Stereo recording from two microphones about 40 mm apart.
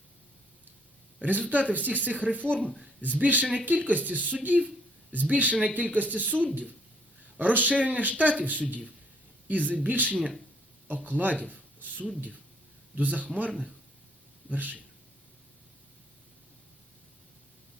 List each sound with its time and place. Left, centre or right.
1.2 s speech: right
3.2 s speech: right
11.5 s a sound: right
13.0 s speech: right
14.5 s speech: right